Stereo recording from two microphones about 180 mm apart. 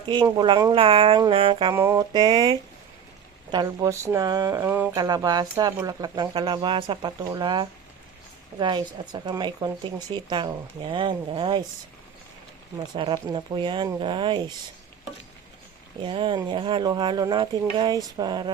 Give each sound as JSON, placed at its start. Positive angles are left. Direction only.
{"t": 0.0, "sound": "speech", "side_deg": -25}
{"t": 1.7, "sound": "music", "side_deg": -15}
{"t": 2.1, "sound": "speech", "side_deg": -25}
{"t": 12.9, "sound": "speech", "side_deg": -25}
{"t": 16.0, "sound": "speech", "side_deg": -30}